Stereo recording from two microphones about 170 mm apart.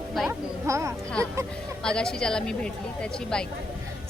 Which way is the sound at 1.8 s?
5° left (ahead or behind).